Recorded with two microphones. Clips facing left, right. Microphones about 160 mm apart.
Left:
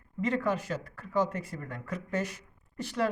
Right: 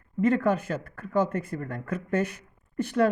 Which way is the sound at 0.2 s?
50° right (ahead or behind).